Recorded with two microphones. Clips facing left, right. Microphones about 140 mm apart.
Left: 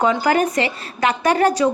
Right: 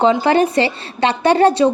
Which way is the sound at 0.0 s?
25° right (ahead or behind).